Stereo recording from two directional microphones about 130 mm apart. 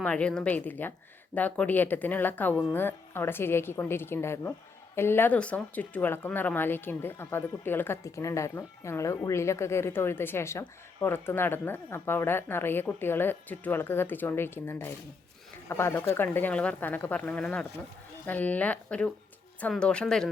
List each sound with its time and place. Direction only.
0.0 s speech: 10° left (ahead or behind)